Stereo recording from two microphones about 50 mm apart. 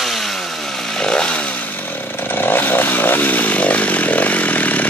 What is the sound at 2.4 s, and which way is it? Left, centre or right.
Chainsaw, left.